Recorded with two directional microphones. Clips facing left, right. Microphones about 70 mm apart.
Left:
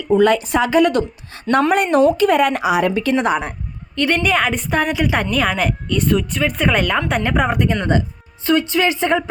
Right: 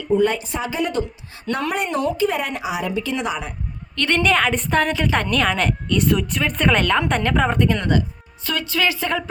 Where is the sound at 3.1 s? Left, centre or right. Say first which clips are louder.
Left 7 dB; left.